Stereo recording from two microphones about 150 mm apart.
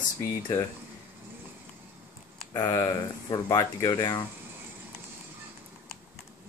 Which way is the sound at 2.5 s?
25° left (ahead or behind).